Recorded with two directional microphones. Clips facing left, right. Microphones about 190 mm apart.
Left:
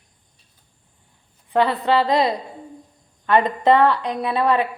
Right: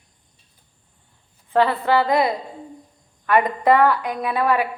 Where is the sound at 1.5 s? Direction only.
20° left (ahead or behind).